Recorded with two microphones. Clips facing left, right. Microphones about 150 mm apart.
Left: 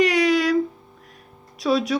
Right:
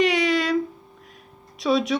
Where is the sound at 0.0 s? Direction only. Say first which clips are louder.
Left 2 dB; centre (ahead or behind).